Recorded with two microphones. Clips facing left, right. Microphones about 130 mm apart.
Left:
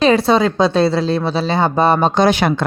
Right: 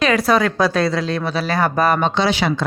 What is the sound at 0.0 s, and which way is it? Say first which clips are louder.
Speech: left 3 dB; 30° left (ahead or behind).